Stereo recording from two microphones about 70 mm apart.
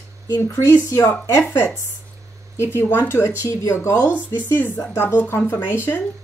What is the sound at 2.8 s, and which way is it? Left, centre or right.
Speech, left.